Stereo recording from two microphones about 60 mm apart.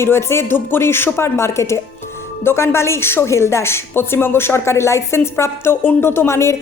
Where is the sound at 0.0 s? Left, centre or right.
Left.